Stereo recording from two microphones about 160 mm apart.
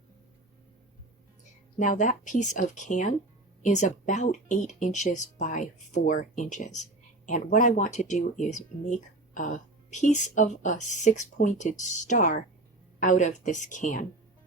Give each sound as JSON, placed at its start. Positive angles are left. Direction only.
{"t": 1.8, "sound": "speech", "side_deg": 55}